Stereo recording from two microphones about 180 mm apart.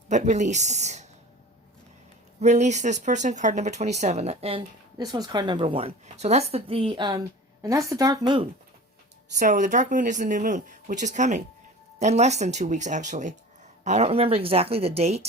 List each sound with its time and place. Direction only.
0.1 s speech: 40° right (ahead or behind)
2.4 s speech: 40° right (ahead or behind); by 8.4 s 25° right (ahead or behind)
9.4 s speech: 45° right (ahead or behind)